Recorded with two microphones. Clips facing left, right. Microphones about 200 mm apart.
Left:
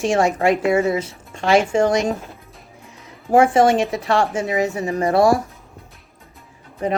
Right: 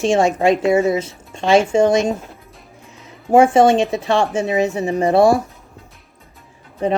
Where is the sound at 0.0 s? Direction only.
25° right (ahead or behind).